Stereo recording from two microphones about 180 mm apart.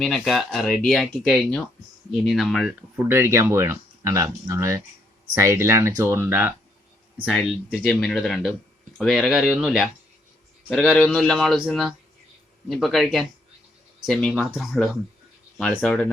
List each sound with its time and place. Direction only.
0.0 s speech: centre (ahead or behind)
3.1 s speech: 15° right (ahead or behind)
7.3 s speech: centre (ahead or behind)